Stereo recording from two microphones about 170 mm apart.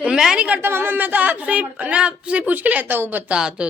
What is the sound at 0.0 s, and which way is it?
Speech, 5° right (ahead or behind).